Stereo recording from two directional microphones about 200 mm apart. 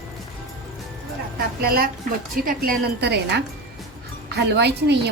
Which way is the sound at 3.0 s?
55° right (ahead or behind).